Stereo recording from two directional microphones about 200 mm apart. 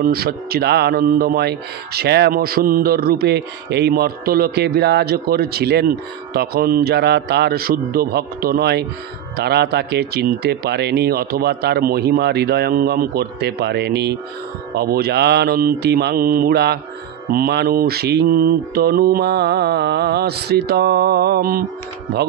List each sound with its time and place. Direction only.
0.0 s speech: 50° right (ahead or behind)